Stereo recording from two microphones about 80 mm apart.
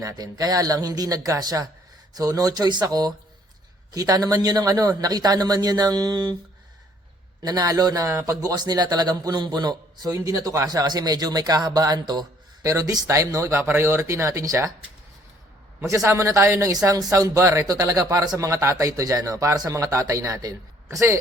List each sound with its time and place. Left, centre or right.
0.0 s speech: right
7.4 s speech: right
10.2 s speech: right
16.0 s speech: right